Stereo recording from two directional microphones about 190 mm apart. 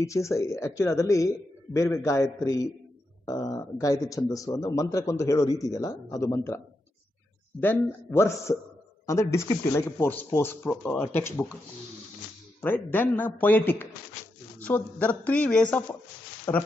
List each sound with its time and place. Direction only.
0.0 s a man's voice: 15° left (ahead or behind)
7.6 s a man's voice: 10° left (ahead or behind)
12.6 s a man's voice: 10° left (ahead or behind)